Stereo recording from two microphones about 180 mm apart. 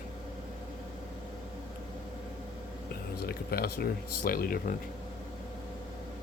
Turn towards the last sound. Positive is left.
turn(degrees=55)  # may be behind; listen again after turning